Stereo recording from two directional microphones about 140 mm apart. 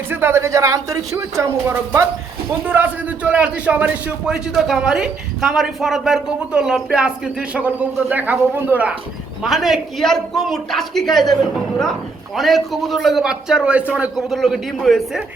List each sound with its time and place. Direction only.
0.1 s a man's voice: 15° right (ahead or behind)
9.4 s a man's voice: centre (ahead or behind)
12.4 s a man's voice: centre (ahead or behind)